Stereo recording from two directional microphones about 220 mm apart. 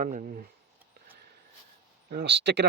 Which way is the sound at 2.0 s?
45° right (ahead or behind).